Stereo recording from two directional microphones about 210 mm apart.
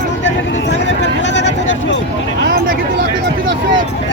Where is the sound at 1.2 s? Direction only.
60° left (ahead or behind).